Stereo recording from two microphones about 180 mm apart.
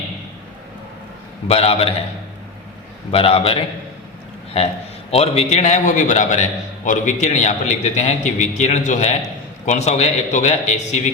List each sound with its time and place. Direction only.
1.5 s a man's voice: 35° left (ahead or behind)
3.1 s a man's voice: 30° left (ahead or behind)